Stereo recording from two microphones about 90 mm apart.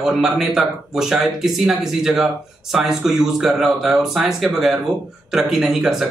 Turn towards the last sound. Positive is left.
turn(degrees=-5)  # may be behind; listen again after turning